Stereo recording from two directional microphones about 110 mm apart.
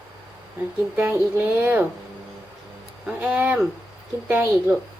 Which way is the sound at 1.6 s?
20° right (ahead or behind).